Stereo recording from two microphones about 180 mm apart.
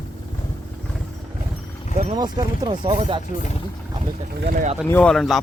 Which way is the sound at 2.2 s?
25° right (ahead or behind).